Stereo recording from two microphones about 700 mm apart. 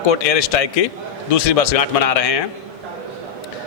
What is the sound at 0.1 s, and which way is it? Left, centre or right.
A man's voice, left.